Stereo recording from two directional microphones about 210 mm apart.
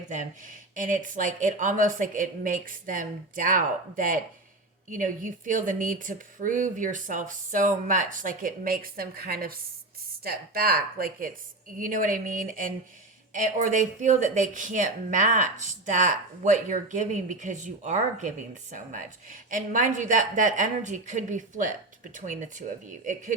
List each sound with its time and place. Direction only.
0.1 s speech: 35° right (ahead or behind)